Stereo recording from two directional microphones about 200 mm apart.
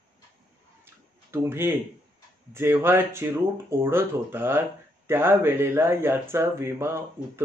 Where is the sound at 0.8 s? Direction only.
10° right (ahead or behind).